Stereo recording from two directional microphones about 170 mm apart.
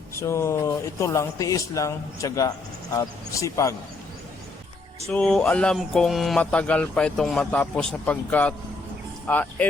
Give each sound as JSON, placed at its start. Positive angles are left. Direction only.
{"t": 0.2, "sound": "speech", "side_deg": 15}
{"t": 5.0, "sound": "speech", "side_deg": 5}